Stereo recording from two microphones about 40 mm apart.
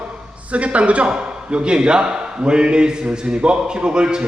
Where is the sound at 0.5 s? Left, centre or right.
Right.